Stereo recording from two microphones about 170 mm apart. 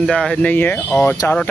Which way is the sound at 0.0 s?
5° left (ahead or behind).